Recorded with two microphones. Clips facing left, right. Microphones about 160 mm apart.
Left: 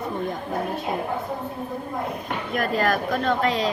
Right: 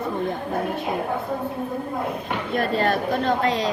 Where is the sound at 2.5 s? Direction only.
30° right (ahead or behind).